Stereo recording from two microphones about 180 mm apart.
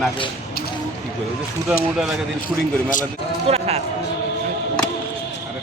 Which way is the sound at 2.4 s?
45° left (ahead or behind).